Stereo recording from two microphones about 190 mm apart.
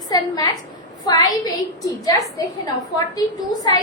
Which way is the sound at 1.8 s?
20° left (ahead or behind).